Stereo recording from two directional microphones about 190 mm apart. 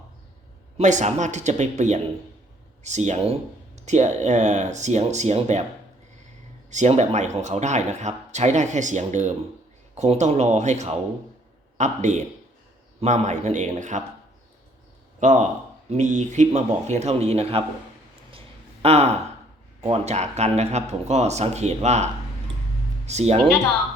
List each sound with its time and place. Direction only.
0.8 s speech: 40° right (ahead or behind)
6.7 s speech: 40° right (ahead or behind)
15.2 s speech: 40° right (ahead or behind)
18.3 s a sound: 30° right (ahead or behind)
19.8 s speech: 35° right (ahead or behind)